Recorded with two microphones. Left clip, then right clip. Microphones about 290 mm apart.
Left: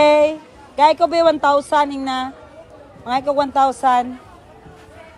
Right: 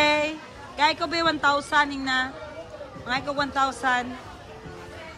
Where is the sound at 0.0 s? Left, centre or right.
Centre.